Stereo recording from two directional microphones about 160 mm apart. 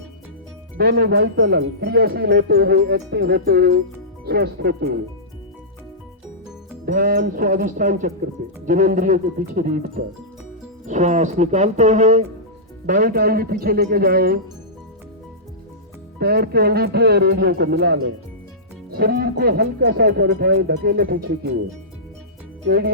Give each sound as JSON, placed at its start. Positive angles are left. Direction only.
{"t": 0.8, "sound": "speech", "side_deg": -85}
{"t": 6.8, "sound": "speech", "side_deg": -60}
{"t": 10.8, "sound": "speech", "side_deg": -50}
{"t": 12.8, "sound": "speech", "side_deg": -60}
{"t": 16.1, "sound": "speech", "side_deg": -80}
{"t": 18.9, "sound": "speech", "side_deg": -70}
{"t": 22.6, "sound": "speech", "side_deg": -75}